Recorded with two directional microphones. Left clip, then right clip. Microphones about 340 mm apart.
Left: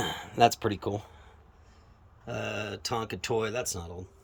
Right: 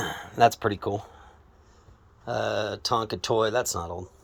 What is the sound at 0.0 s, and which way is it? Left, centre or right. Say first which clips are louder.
Speech: right 3 dB; centre.